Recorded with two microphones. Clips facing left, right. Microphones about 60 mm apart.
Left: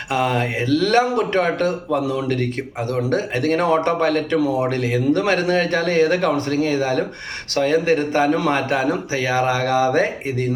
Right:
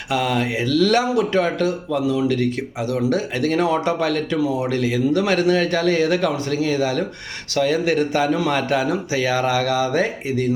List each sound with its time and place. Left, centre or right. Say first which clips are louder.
0.1 s a man's voice: left 1 dB; left